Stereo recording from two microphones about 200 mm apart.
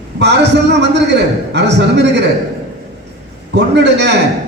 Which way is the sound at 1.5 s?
60° right (ahead or behind).